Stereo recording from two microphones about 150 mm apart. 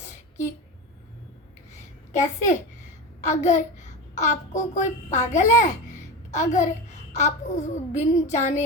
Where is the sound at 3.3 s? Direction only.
50° left (ahead or behind).